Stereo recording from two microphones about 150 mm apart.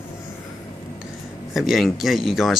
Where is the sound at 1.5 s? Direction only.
Centre (ahead or behind).